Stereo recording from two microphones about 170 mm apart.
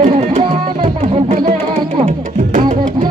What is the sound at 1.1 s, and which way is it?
Music, 40° right (ahead or behind).